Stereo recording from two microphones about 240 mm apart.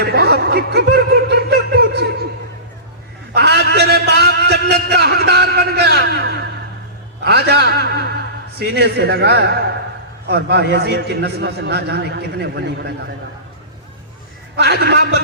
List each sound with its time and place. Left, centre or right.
0.0 s snicker: right
3.3 s a sound: right
7.3 s a man's voice: right
14.5 s a man's voice: right